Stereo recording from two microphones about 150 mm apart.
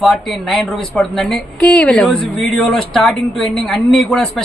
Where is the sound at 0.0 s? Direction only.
Centre (ahead or behind).